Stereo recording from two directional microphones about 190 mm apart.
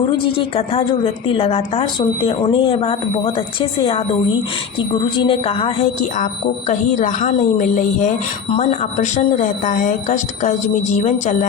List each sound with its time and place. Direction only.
0.3 s a woman's voice: 30° left (ahead or behind)
5.1 s speech: 25° left (ahead or behind)